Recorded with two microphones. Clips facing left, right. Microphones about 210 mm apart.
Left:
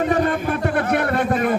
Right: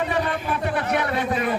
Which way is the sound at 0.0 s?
45° left (ahead or behind).